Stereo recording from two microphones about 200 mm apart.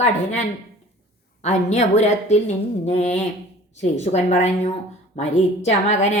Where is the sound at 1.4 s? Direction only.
35° left (ahead or behind).